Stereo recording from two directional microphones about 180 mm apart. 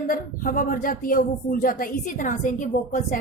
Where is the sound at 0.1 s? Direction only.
50° left (ahead or behind).